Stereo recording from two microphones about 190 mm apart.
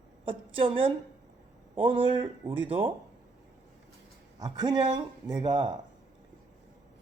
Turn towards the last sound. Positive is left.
turn(degrees=-25)  # may be behind; listen again after turning